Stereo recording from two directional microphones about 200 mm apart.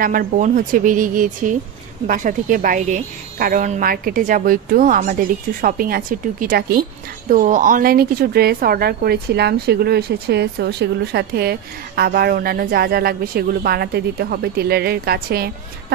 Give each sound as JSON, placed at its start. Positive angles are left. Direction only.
{"t": 0.0, "sound": "a woman's voice", "side_deg": -45}